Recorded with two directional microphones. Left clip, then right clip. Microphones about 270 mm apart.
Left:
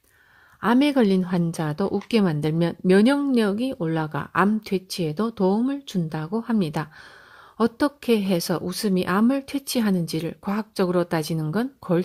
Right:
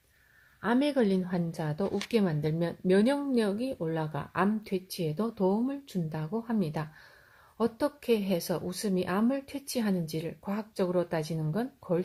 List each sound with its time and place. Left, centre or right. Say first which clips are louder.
0.6 s speech: left 7 dB; left